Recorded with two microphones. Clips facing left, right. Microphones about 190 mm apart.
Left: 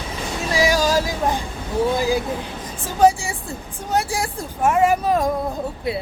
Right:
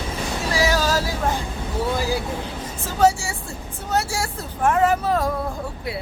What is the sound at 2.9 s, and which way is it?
Speech, 15° left (ahead or behind).